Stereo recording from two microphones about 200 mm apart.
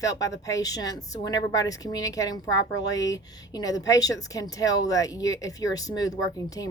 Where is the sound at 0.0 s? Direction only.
15° left (ahead or behind).